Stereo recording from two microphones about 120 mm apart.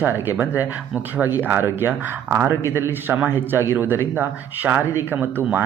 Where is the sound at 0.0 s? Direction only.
15° right (ahead or behind).